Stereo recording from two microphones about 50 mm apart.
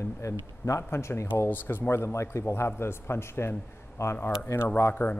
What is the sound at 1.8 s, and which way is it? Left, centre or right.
A man's voice, left.